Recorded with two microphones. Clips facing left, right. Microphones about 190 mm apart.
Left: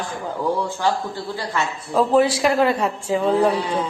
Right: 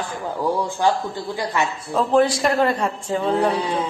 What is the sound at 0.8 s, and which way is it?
Speech, 15° right (ahead or behind).